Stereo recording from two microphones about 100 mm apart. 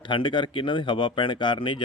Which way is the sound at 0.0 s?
55° left (ahead or behind).